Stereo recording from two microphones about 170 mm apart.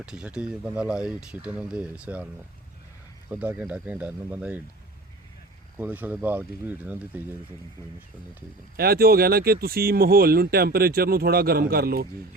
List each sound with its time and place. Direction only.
0.0 s speech: 5° right (ahead or behind)
5.7 s speech: 10° right (ahead or behind)
8.7 s speech: 65° right (ahead or behind)